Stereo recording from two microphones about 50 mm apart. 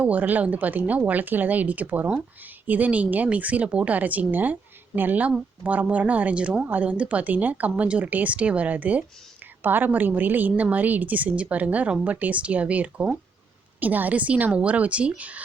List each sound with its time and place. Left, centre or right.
0.0 s a woman's voice: right